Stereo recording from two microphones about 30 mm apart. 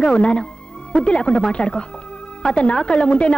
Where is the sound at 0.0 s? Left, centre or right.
Left.